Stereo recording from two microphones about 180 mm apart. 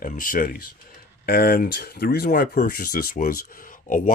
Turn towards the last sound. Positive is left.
turn(degrees=50)  # may be behind; listen again after turning